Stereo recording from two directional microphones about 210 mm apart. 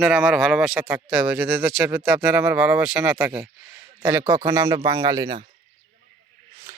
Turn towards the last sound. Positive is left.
turn(degrees=-15)  # may be behind; listen again after turning